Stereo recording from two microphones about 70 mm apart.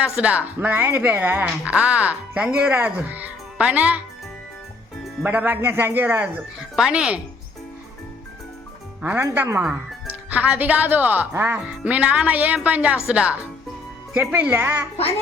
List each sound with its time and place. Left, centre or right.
0.0 s speech: centre
5.2 s speech: right
6.7 s speech: centre
9.3 s a woman's voice: right
9.6 s speech: right
11.6 s speech: centre
14.3 s a woman's voice: right